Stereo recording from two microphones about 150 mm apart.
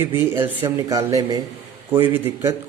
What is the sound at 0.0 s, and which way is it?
A man's voice, 15° right (ahead or behind).